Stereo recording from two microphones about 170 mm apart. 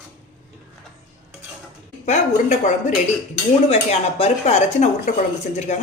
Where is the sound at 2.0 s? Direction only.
45° left (ahead or behind).